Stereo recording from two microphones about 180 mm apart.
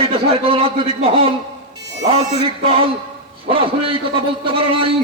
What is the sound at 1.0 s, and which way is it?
Music, 30° right (ahead or behind).